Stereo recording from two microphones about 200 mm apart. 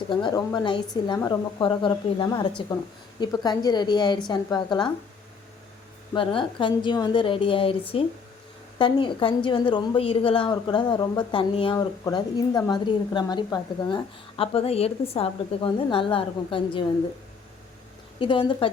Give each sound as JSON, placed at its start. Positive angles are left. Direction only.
{"t": 0.1, "sound": "a woman's voice", "side_deg": 20}
{"t": 6.1, "sound": "a woman's voice", "side_deg": 25}
{"t": 8.8, "sound": "a woman's voice", "side_deg": 25}
{"t": 18.2, "sound": "a woman's voice", "side_deg": 25}